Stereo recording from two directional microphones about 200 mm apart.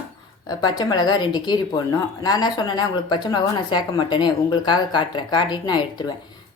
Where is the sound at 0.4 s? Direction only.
20° left (ahead or behind).